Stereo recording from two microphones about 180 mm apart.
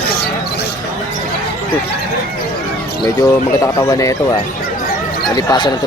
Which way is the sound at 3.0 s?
20° left (ahead or behind).